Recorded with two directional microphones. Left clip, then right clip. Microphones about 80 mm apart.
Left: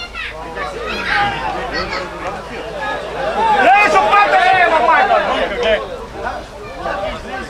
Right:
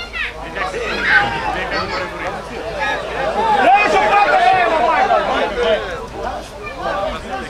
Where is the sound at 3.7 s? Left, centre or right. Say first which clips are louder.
Left 2 dB; left.